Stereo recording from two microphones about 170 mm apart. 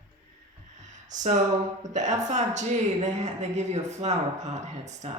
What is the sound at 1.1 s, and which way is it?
Speech, 45° right (ahead or behind).